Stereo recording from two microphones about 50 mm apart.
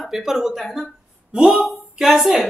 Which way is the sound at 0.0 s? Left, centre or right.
Centre.